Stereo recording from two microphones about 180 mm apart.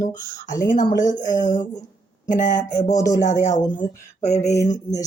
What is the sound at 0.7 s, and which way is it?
A woman's voice, 45° left (ahead or behind).